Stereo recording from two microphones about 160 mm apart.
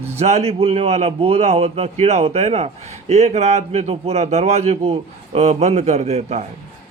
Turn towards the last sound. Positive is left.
turn(degrees=-40)  # may be behind; listen again after turning